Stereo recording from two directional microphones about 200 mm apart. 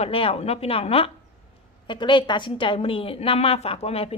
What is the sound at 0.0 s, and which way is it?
A woman's voice, 30° left (ahead or behind).